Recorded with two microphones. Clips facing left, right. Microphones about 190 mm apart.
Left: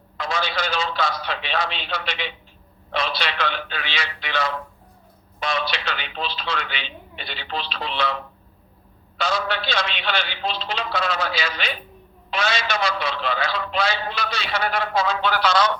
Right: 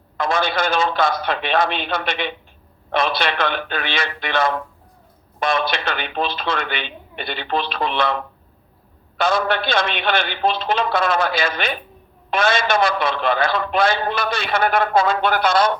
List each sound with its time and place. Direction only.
0.2 s a man's voice: 50° right (ahead or behind)